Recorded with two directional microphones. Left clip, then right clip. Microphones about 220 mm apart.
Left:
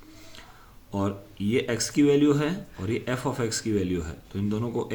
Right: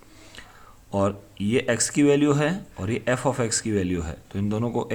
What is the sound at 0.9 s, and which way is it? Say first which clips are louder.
Speech: right 6 dB; 35° right (ahead or behind).